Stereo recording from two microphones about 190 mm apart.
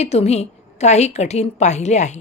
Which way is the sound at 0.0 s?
35° left (ahead or behind).